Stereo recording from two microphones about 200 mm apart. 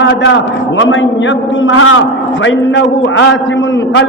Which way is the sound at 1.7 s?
85° left.